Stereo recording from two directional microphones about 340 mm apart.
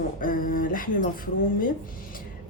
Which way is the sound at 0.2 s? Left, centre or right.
Left.